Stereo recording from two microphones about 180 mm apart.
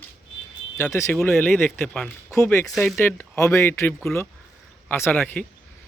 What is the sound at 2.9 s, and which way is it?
Speech, 10° left (ahead or behind).